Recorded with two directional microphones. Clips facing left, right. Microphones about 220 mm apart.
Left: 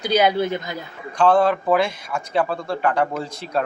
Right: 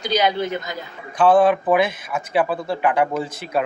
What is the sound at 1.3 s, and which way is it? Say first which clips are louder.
Speech: right 4 dB; 15° right (ahead or behind).